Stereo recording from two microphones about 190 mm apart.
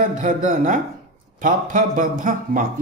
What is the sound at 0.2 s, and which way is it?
Speech, 40° right (ahead or behind).